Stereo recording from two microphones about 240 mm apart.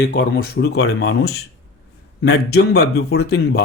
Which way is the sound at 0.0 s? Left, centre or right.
Left.